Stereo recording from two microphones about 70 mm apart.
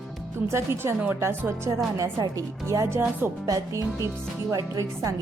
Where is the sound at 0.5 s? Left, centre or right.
Right.